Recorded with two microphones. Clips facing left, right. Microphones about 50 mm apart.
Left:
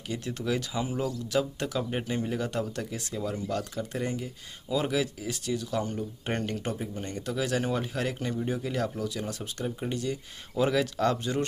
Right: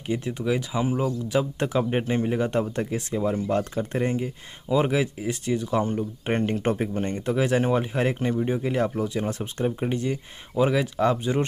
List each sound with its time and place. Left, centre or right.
0.1 s speech: centre
10.6 s speech: centre